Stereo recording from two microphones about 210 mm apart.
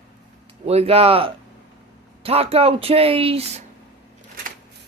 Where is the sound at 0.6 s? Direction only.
30° right (ahead or behind).